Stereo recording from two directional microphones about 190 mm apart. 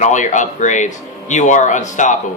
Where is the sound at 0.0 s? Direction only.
40° left (ahead or behind).